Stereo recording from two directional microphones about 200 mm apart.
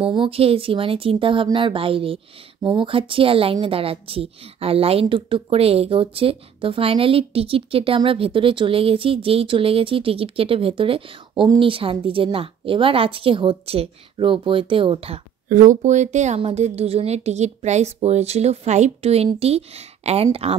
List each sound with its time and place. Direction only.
0.0 s a woman's voice: 25° right (ahead or behind)
15.4 s a woman's voice: 40° right (ahead or behind)